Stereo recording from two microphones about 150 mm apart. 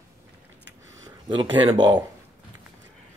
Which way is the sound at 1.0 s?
30° right (ahead or behind).